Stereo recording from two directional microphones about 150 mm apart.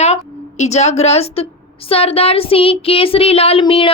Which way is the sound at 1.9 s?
40° left (ahead or behind).